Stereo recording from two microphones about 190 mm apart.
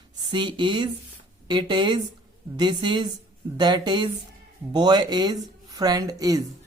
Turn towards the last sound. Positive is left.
turn(degrees=-20)  # may be behind; listen again after turning